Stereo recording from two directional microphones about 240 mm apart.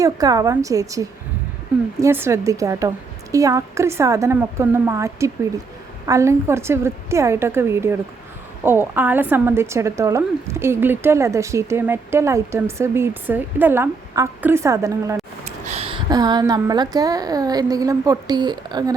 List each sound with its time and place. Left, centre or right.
0.0 s a woman's voice: centre
15.6 s a woman's voice: right